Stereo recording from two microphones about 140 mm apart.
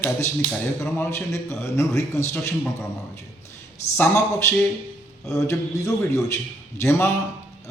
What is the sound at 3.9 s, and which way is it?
A man's voice, 20° left (ahead or behind).